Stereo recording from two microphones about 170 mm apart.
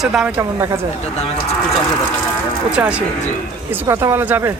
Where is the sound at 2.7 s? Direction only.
5° right (ahead or behind).